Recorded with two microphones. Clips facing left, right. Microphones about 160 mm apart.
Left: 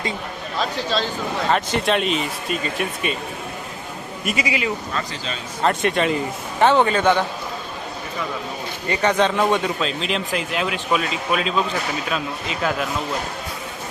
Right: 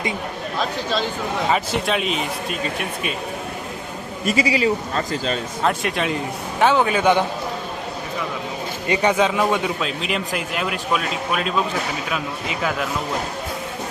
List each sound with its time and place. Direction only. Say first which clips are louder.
1.5 s a man's voice: left 2 dB; 5° right (ahead or behind)
4.3 s speech: right 5 dB; 35° right (ahead or behind)
5.6 s a man's voice: left 3 dB; centre (ahead or behind)
8.9 s a man's voice: right 1 dB; 15° right (ahead or behind)